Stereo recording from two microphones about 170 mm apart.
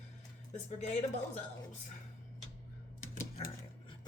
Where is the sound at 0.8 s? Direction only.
45° left (ahead or behind).